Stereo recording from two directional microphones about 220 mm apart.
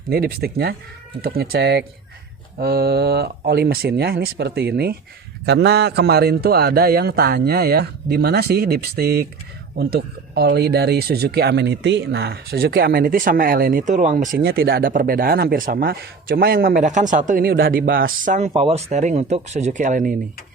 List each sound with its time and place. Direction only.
0.1 s a man's voice: 45° right (ahead or behind)